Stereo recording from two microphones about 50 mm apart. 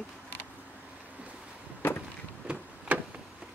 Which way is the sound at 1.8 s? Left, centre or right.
Left.